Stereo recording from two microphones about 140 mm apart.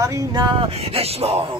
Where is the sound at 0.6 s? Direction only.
45° right (ahead or behind).